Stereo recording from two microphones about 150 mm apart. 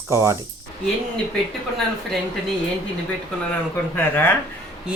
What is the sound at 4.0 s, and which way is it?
Speech, 10° left (ahead or behind).